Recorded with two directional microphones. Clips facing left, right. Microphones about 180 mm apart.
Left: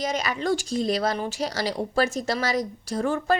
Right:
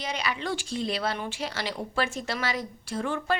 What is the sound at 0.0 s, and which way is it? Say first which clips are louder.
A woman's voice: left 5 dB; 45° left (ahead or behind).